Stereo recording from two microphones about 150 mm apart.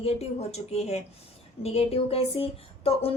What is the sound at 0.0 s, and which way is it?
A woman's voice, 45° left (ahead or behind).